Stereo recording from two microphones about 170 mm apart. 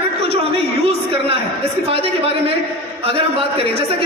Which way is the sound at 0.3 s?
35° right (ahead or behind).